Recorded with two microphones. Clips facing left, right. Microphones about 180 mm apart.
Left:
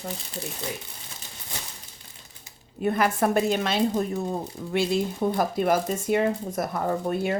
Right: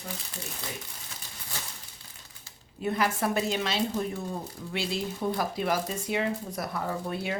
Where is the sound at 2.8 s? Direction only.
55° left (ahead or behind).